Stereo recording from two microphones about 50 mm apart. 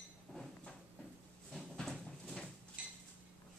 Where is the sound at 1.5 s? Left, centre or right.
Centre.